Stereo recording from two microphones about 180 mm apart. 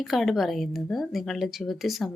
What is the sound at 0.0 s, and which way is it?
A woman's voice, centre (ahead or behind).